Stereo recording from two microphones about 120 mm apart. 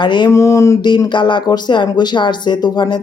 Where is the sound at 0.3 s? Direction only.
25° left (ahead or behind).